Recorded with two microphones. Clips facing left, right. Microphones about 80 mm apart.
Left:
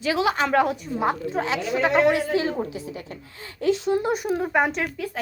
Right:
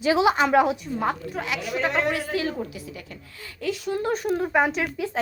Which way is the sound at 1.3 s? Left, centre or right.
Left.